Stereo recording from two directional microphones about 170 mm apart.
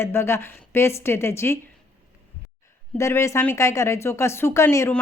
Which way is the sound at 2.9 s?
15° left (ahead or behind).